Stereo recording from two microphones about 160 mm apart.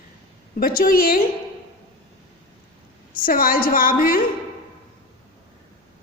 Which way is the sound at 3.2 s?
60° left (ahead or behind).